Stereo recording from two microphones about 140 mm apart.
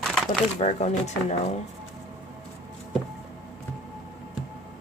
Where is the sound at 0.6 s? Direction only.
50° left (ahead or behind).